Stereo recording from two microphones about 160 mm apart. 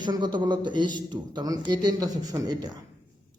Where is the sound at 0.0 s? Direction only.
30° right (ahead or behind).